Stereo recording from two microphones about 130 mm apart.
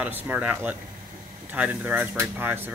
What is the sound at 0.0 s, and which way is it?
Speech, 10° right (ahead or behind).